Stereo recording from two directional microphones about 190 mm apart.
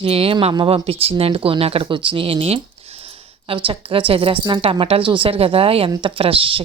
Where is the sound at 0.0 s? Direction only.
30° right (ahead or behind).